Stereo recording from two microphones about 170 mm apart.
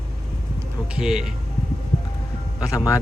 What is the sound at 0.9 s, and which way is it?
Speech, 5° right (ahead or behind).